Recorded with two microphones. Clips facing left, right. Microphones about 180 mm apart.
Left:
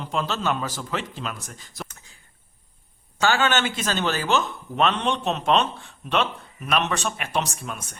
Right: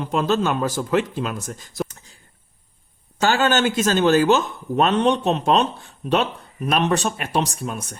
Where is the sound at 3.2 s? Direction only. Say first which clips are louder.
Right 3 dB; 40° right (ahead or behind).